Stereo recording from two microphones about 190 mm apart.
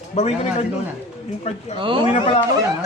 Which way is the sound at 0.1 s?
35° left (ahead or behind).